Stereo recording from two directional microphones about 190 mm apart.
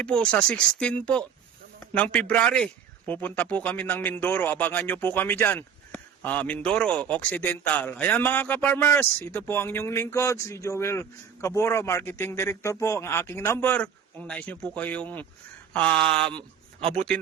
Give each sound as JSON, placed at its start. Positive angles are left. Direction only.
{"t": 0.0, "sound": "speech", "side_deg": 5}
{"t": 16.8, "sound": "a man's voice", "side_deg": -30}